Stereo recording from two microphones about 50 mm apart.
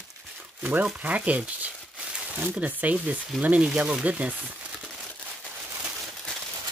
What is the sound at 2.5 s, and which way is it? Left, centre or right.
Speech, right.